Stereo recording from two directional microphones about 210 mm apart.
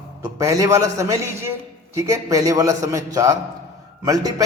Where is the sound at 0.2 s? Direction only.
15° right (ahead or behind).